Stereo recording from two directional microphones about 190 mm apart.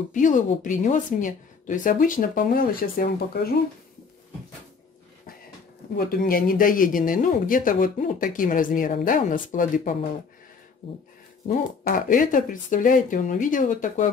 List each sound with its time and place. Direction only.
0.1 s speech: 40° left (ahead or behind)
5.9 s speech: 50° left (ahead or behind)
11.4 s speech: 45° left (ahead or behind)